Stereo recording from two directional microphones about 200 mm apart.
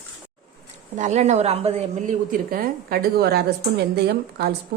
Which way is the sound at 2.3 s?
45° right (ahead or behind).